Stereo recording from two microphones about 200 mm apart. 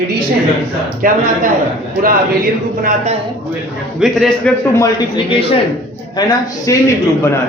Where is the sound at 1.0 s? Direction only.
45° right (ahead or behind).